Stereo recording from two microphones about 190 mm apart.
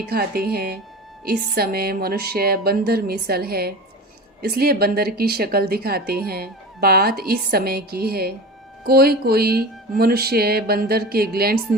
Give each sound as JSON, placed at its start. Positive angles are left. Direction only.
{"t": 0.0, "sound": "speech", "side_deg": -55}